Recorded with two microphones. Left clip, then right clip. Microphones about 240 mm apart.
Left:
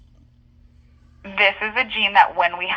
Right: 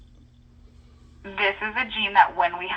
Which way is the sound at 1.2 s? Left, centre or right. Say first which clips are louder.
Left 6 dB; left.